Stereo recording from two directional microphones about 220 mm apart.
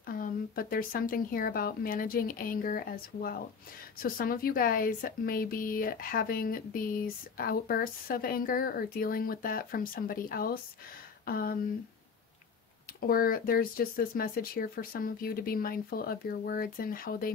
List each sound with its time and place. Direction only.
0.0 s speech: 40° left (ahead or behind)
13.0 s speech: 40° left (ahead or behind)